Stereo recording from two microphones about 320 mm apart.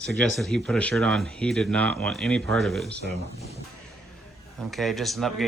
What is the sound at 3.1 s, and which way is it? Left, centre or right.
Speech, centre.